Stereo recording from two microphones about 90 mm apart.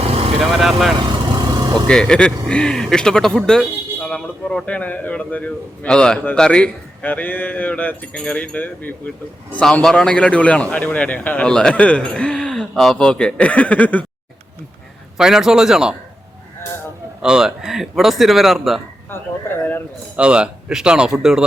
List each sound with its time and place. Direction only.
0.0 s vehicle: 90° right
0.3 s speech: centre (ahead or behind)
0.9 s vehicle: 55° right (ahead or behind)
1.9 s speech: 10° left (ahead or behind)
15.2 s a man's voice: 5° right (ahead or behind)
17.2 s a man's voice: 10° right (ahead or behind)
19.1 s speech: 25° left (ahead or behind)
20.1 s speech: 10° right (ahead or behind)